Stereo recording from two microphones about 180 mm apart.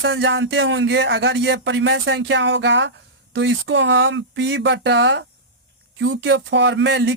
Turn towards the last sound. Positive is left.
turn(degrees=-90)